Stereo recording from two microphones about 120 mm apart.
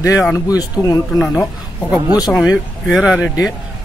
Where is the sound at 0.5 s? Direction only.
30° left (ahead or behind).